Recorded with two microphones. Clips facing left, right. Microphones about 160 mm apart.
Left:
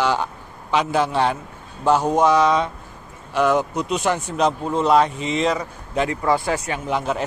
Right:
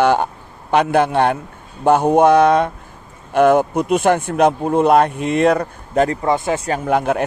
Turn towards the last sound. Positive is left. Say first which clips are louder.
# right 6 dB
turn(degrees=-55)  # may be behind; listen again after turning